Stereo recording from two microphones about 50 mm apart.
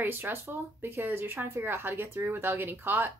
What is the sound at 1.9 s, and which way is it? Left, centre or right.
Speech, right.